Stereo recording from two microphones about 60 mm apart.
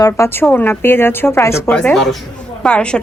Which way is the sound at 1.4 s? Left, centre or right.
Left.